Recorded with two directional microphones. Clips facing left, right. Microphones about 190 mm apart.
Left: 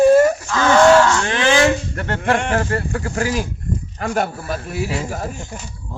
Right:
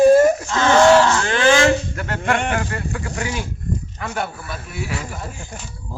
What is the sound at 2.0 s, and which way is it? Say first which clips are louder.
Speech: left 2 dB; 30° left (ahead or behind).